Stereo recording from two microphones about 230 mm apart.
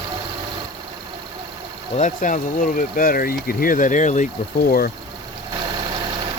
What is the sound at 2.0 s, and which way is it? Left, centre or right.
Speech, left.